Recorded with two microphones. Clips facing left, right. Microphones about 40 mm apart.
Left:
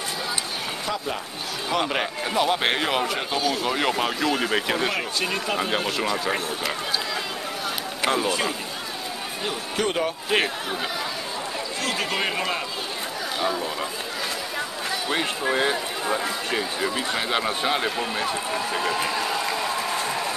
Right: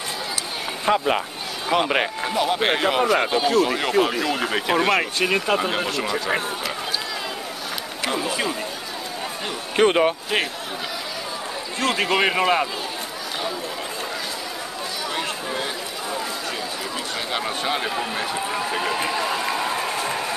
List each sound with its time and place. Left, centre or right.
0.8 s speech: right
1.7 s speech: centre
2.2 s speech: centre
3.2 s speech: centre
3.6 s speech: centre
4.7 s speech: centre
5.6 s speech: centre
8.0 s speech: centre
9.8 s speech: right
11.8 s speech: right
15.5 s speech: left
17.1 s speech: centre